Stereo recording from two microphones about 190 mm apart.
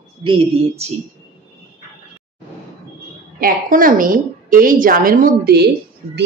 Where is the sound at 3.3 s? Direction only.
50° right (ahead or behind).